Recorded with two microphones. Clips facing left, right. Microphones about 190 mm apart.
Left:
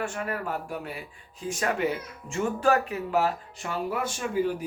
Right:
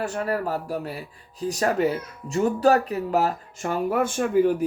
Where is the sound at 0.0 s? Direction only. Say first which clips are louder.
Right 5 dB; 40° right (ahead or behind).